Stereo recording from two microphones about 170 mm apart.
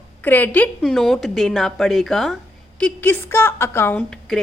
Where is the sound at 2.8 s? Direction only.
10° left (ahead or behind).